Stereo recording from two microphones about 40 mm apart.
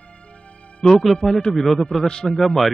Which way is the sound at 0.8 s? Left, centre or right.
Centre.